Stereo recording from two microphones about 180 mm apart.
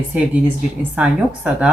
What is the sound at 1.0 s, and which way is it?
Speech, 5° right (ahead or behind).